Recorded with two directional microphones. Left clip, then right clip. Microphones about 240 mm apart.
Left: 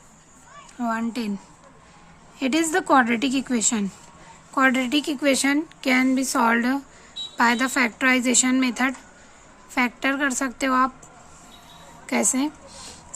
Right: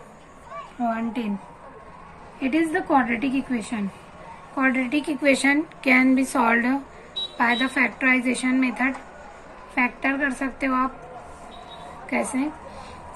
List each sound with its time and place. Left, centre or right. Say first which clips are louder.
0.8 s a woman's voice: even; left
2.4 s a woman's voice: left 1 dB; left
12.0 s speech: left 2 dB; left